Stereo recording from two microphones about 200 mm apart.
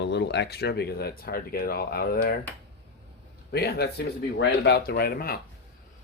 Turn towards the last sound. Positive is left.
turn(degrees=50)  # may be behind; listen again after turning